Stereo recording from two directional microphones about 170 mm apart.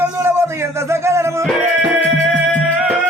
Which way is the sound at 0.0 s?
15° right (ahead or behind).